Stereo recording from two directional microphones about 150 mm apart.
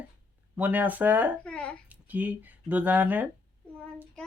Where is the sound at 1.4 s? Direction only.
5° left (ahead or behind).